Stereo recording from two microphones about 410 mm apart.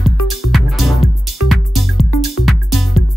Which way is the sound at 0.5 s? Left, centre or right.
Centre.